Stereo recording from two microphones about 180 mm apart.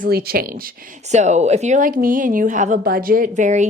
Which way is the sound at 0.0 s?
55° right (ahead or behind).